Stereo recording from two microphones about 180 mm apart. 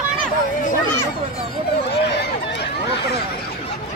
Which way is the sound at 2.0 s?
70° left (ahead or behind).